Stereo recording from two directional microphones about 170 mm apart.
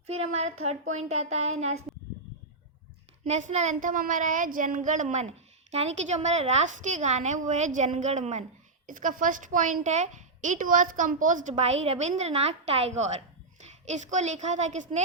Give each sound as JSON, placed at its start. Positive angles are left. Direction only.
{"t": 0.1, "sound": "speech", "side_deg": -40}
{"t": 3.2, "sound": "a woman's voice", "side_deg": -45}